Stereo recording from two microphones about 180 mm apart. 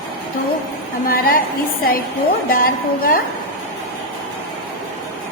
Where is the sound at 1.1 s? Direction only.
55° left (ahead or behind).